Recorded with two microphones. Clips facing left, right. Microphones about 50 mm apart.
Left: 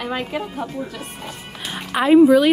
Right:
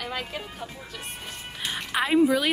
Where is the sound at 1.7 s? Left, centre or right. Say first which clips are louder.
Left 9 dB; centre.